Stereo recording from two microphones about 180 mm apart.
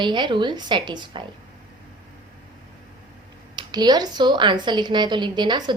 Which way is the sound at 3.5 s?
25° right (ahead or behind).